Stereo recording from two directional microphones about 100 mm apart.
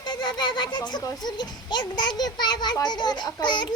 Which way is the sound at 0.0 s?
50° left (ahead or behind).